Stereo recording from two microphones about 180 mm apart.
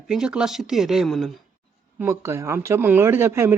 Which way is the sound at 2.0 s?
15° right (ahead or behind).